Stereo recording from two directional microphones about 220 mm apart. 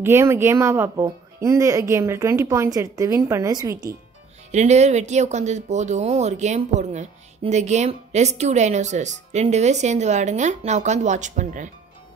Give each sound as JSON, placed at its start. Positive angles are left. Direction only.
{"t": 0.0, "sound": "speech", "side_deg": -10}
{"t": 4.5, "sound": "speech", "side_deg": -30}